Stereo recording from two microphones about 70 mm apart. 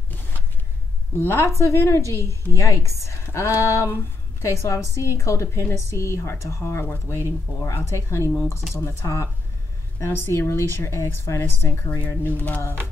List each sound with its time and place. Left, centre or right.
1.2 s a woman's voice: left